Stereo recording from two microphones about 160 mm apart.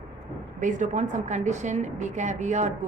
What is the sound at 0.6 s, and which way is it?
A woman's voice, 50° right (ahead or behind).